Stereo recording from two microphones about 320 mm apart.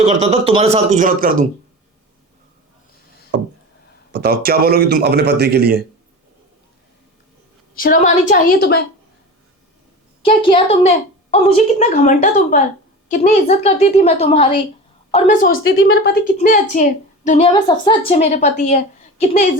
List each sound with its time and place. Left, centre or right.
0.0 s a man's voice: centre
4.1 s a man's voice: right
7.8 s a woman's voice: left
10.2 s a woman's voice: centre